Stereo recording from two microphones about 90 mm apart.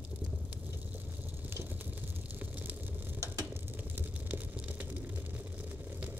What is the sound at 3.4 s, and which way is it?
Vehicle, 20° right (ahead or behind).